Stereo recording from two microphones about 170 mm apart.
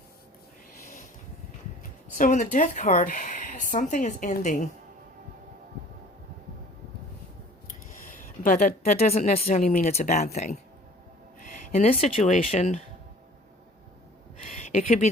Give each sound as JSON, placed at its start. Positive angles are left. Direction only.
{"t": 2.1, "sound": "speech", "side_deg": 50}
{"t": 8.4, "sound": "a woman's voice", "side_deg": 55}
{"t": 8.9, "sound": "speech", "side_deg": 40}
{"t": 14.4, "sound": "a sound", "side_deg": 40}